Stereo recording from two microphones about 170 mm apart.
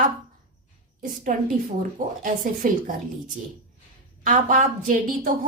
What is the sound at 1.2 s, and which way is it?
A woman's voice, 55° right (ahead or behind).